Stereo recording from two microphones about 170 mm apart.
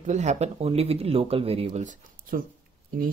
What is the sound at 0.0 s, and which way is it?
Speech, 45° right (ahead or behind).